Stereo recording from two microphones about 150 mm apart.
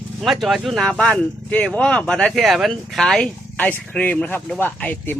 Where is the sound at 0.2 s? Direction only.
Centre (ahead or behind).